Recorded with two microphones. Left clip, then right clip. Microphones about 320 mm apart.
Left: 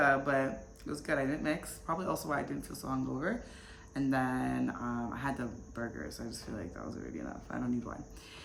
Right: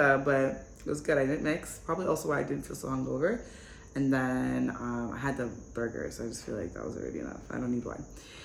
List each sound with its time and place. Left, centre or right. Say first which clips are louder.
0.0 s speech: right 4 dB; centre